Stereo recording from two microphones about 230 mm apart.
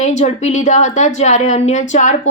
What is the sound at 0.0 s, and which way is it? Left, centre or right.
A woman's voice, left.